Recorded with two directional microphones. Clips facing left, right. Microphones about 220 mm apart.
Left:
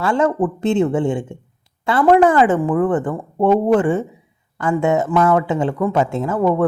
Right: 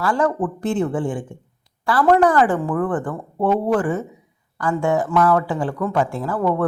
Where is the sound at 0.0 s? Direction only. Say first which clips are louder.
Left 3 dB; 25° left (ahead or behind).